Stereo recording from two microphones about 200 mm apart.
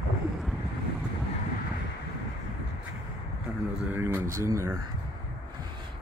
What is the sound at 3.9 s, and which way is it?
Speech, 15° right (ahead or behind).